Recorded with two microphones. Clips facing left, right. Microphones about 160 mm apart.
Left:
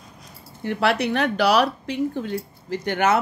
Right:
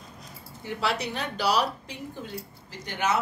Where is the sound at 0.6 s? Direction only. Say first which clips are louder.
Left 8 dB; 60° left (ahead or behind).